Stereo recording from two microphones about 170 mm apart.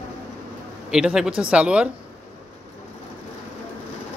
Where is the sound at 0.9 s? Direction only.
5° right (ahead or behind).